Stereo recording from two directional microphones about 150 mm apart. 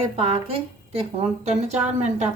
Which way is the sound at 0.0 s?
40° right (ahead or behind).